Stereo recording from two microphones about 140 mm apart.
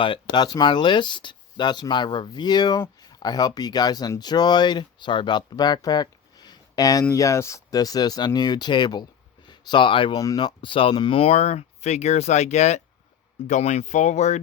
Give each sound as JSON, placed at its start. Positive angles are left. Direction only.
{"t": 0.0, "sound": "speech", "side_deg": 35}